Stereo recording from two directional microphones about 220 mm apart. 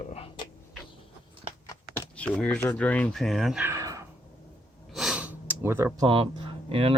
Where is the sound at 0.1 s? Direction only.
25° left (ahead or behind).